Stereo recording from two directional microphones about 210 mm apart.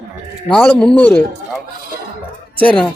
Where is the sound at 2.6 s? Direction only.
5° left (ahead or behind).